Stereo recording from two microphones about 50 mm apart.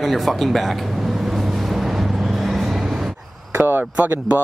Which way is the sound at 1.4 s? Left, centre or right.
Centre.